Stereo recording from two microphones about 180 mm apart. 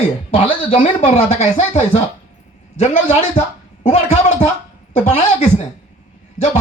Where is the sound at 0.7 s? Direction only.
35° left (ahead or behind).